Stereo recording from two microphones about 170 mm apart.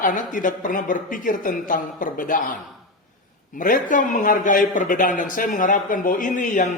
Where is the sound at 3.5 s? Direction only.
50° left (ahead or behind).